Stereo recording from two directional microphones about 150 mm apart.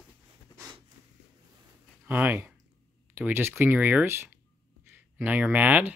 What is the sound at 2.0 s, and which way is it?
Speech, 15° right (ahead or behind).